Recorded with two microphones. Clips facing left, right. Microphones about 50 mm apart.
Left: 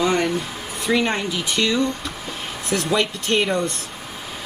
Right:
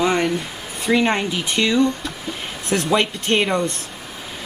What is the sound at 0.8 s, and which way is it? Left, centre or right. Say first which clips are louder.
Speech: right 3 dB; right.